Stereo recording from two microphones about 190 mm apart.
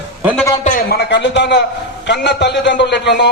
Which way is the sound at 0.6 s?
50° left (ahead or behind).